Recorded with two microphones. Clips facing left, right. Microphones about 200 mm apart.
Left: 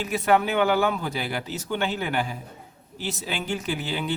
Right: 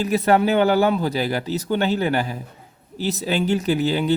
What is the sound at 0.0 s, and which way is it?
Speech, 40° right (ahead or behind).